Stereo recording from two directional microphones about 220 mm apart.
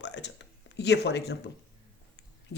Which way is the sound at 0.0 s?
50° left (ahead or behind).